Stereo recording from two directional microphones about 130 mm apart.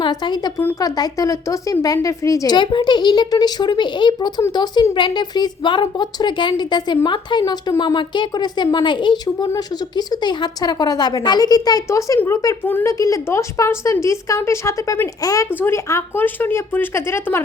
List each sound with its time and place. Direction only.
0.0 s a woman's voice: 35° left (ahead or behind)